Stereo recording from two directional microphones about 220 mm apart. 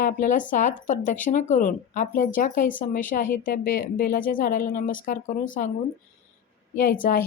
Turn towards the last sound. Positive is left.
turn(degrees=40)  # may be behind; listen again after turning